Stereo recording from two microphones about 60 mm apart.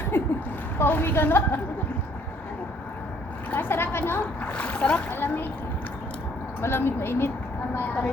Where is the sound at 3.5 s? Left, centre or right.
Left.